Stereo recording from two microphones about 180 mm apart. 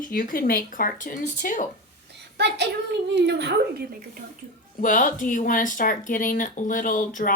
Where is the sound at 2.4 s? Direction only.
70° right (ahead or behind).